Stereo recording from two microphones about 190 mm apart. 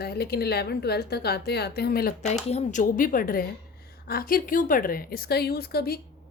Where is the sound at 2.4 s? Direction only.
35° left (ahead or behind).